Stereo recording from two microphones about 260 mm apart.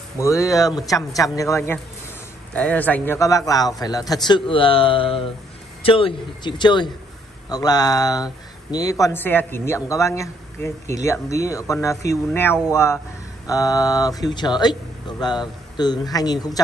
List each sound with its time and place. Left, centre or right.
0.2 s a man's voice: centre